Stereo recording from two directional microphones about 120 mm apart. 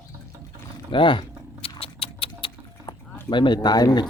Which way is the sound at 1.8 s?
50° left (ahead or behind).